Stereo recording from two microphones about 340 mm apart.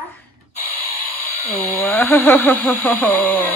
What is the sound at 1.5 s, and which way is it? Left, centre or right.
Speech, centre.